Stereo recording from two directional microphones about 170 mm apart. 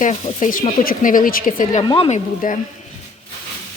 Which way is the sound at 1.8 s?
30° left (ahead or behind).